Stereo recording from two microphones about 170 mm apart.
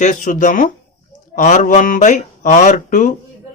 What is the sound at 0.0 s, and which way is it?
Speech, 50° left (ahead or behind).